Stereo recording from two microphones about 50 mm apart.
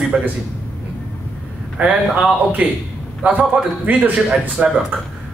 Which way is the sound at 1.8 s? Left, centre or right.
Right.